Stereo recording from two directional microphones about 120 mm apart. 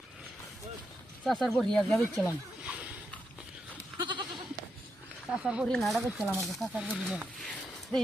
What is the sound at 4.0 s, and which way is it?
Goat, 40° right (ahead or behind).